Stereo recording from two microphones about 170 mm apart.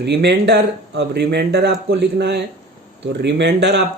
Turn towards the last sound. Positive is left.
turn(degrees=-90)